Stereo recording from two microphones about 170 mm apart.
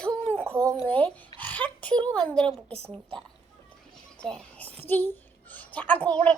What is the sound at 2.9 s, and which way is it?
A woman's voice, 5° left (ahead or behind).